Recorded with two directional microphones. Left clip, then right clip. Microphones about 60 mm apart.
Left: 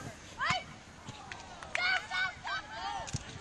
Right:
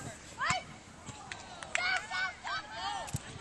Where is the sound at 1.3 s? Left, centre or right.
Right.